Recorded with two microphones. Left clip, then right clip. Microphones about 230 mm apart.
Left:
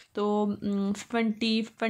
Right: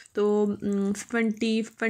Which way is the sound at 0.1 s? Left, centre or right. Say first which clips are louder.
Right 4 dB; centre.